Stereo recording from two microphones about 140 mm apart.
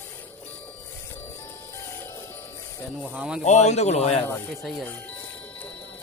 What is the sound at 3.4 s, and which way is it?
Speech, 55° left (ahead or behind).